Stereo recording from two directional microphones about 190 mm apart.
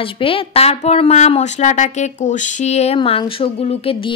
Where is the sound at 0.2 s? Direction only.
30° left (ahead or behind).